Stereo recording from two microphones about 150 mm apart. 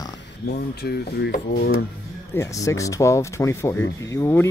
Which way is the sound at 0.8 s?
90° left.